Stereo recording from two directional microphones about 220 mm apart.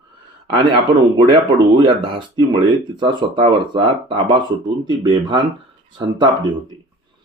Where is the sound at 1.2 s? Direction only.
20° right (ahead or behind).